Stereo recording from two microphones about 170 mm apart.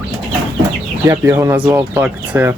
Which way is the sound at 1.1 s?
15° right (ahead or behind).